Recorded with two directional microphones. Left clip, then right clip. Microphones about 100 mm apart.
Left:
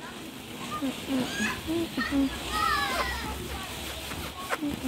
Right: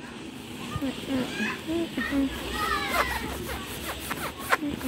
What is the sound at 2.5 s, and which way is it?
Children playing, 30° left (ahead or behind).